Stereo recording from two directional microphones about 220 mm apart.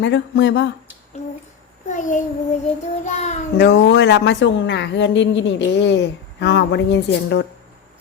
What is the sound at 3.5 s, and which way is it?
A woman's voice, 50° left (ahead or behind).